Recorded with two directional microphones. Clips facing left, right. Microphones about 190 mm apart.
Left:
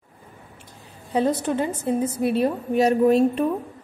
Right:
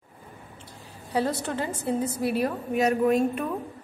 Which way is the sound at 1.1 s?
20° left (ahead or behind).